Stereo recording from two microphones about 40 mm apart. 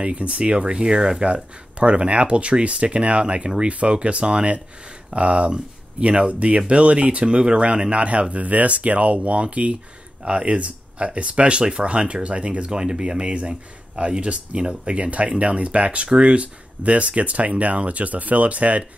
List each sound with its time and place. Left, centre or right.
0.0 s speech: right
1.2 s speech: right